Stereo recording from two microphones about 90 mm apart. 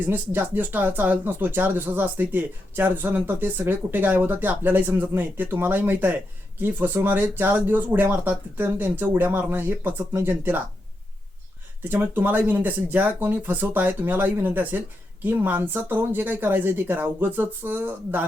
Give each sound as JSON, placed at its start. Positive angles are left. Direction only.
{"t": 0.0, "sound": "speech", "side_deg": -20}
{"t": 11.8, "sound": "speech", "side_deg": -20}